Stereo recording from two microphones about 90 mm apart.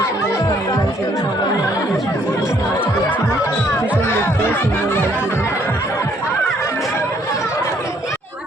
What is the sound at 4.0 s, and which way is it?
Music, 25° left (ahead or behind).